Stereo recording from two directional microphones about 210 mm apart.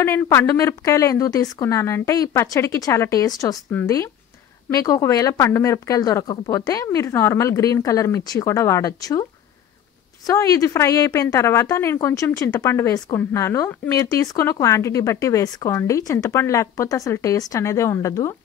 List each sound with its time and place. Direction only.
0.0 s a woman's voice: 10° left (ahead or behind)
10.2 s a woman's voice: 15° left (ahead or behind)